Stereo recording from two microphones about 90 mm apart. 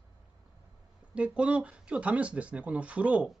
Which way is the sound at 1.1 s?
15° right (ahead or behind).